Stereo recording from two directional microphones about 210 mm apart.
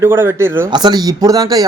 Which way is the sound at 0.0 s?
10° right (ahead or behind).